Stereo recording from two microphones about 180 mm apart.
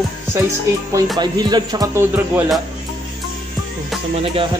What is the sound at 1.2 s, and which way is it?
A man's voice, 25° right (ahead or behind).